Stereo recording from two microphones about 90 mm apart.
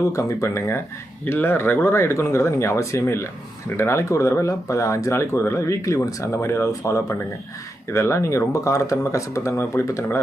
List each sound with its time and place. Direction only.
0.0 s speech: 35° left (ahead or behind)